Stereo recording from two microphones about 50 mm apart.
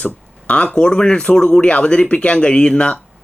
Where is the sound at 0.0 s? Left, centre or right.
Left.